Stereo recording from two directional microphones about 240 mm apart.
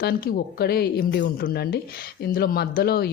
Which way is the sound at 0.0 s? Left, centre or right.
Left.